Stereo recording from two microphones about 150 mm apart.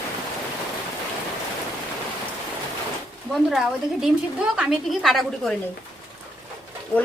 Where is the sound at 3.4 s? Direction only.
5° right (ahead or behind).